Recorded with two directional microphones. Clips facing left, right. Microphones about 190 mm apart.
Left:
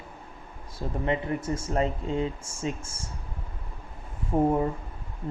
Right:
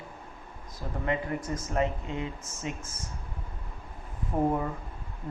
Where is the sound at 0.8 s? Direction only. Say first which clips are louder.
Left 3 dB; 25° left (ahead or behind).